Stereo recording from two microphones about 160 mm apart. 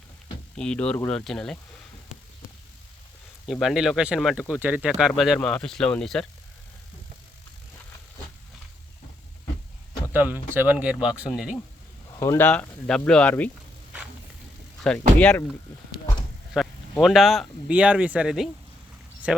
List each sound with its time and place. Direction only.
0.5 s speech: 5° left (ahead or behind)
3.4 s speech: centre (ahead or behind)
10.1 s speech: 10° right (ahead or behind)
12.2 s speech: 20° left (ahead or behind)
12.5 s speech: 5° left (ahead or behind)
14.8 s speech: 5° left (ahead or behind)
16.6 s speech: centre (ahead or behind)